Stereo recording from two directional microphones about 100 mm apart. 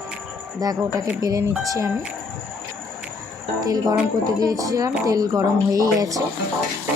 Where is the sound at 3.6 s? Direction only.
35° right (ahead or behind).